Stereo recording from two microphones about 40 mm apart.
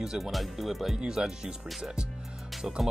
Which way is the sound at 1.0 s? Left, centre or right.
Centre.